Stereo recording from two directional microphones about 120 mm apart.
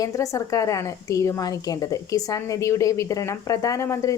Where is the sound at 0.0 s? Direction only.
30° left (ahead or behind).